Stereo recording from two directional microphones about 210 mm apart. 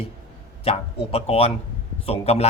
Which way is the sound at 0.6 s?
30° left (ahead or behind).